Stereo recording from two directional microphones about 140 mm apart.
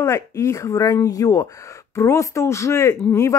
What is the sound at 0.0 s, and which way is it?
A woman's voice, 20° left (ahead or behind).